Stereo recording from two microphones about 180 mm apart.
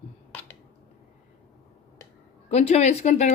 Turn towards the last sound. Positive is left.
turn(degrees=40)  # may be behind; listen again after turning